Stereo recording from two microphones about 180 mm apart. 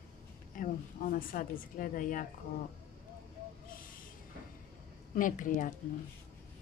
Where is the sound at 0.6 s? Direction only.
50° left (ahead or behind).